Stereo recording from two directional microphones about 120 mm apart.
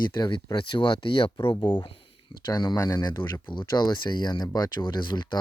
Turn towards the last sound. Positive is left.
turn(degrees=40)  # may be behind; listen again after turning